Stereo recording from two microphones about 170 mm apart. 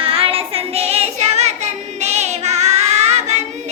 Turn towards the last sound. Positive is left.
turn(degrees=-40)  # may be behind; listen again after turning